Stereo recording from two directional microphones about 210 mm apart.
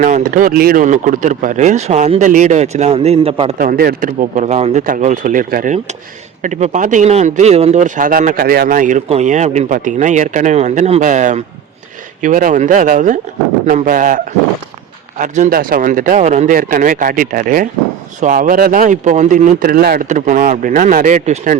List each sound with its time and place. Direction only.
0.0 s speech: 40° right (ahead or behind)
3.6 s speech: 45° right (ahead or behind)
15.2 s speech: 40° right (ahead or behind)